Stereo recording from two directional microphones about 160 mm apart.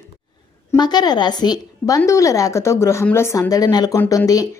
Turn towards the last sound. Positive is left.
turn(degrees=20)  # may be behind; listen again after turning